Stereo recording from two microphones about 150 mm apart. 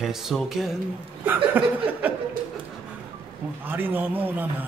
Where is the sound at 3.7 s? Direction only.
15° right (ahead or behind).